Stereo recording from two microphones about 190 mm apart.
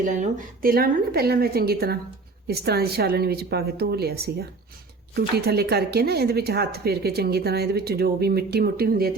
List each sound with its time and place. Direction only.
0.0 s a woman's voice: 40° right (ahead or behind)